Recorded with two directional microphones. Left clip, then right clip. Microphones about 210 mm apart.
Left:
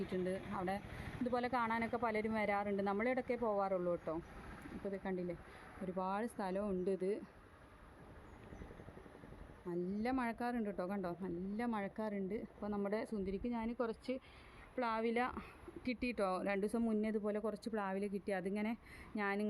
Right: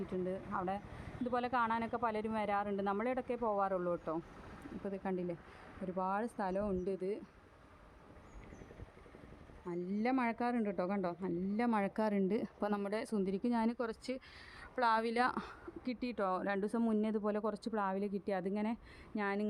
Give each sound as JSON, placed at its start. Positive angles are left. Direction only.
{"t": 0.1, "sound": "speech", "side_deg": 0}
{"t": 9.6, "sound": "speech", "side_deg": -25}
{"t": 13.1, "sound": "a woman's voice", "side_deg": -25}
{"t": 15.9, "sound": "speech", "side_deg": -50}
{"t": 16.1, "sound": "speech", "side_deg": -5}